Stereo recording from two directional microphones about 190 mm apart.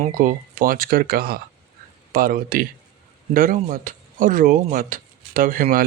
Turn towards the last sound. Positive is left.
turn(degrees=-45)  # may be behind; listen again after turning